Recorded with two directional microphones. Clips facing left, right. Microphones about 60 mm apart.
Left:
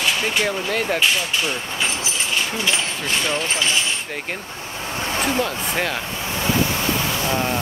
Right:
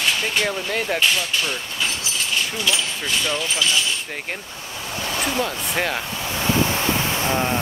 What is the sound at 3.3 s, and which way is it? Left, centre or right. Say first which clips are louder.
Speech: left 1 dB; left.